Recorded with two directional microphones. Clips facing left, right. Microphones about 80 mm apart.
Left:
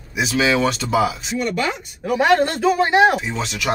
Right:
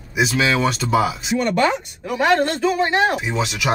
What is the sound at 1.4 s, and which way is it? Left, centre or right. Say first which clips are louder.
Speech: right 4 dB; right.